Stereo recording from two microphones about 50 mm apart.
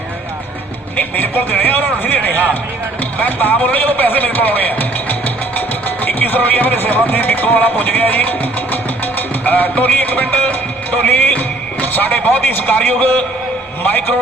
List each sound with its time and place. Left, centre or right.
0.9 s a man's voice: left